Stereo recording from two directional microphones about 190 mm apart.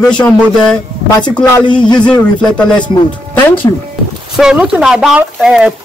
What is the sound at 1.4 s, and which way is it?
Speech, 25° left (ahead or behind).